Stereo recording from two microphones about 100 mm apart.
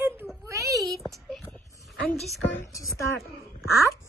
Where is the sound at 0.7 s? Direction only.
Centre (ahead or behind).